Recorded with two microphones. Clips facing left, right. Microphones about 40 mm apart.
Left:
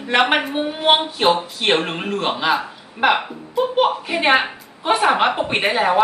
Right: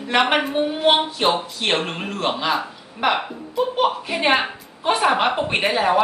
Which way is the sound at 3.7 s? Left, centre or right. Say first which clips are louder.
Left 4 dB; centre.